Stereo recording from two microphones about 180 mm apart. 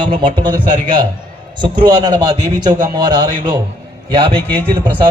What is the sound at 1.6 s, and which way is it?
A man's voice, 25° right (ahead or behind).